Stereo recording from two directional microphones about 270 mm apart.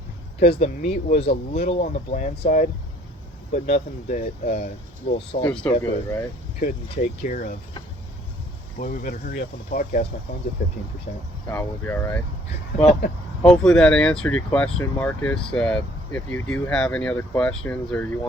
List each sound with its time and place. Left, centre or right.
0.3 s speech: left
5.5 s speech: centre
6.6 s speech: left
8.8 s speech: left
11.4 s speech: centre
12.5 s speech: left
13.4 s speech: centre